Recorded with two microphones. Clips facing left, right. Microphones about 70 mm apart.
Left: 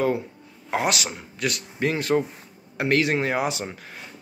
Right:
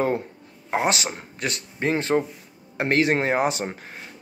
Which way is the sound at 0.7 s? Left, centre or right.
Right.